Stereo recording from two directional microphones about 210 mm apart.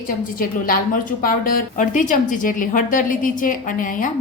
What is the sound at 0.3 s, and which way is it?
A woman's voice, 45° left (ahead or behind).